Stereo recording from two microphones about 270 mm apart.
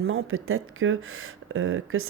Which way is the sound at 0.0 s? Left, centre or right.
Right.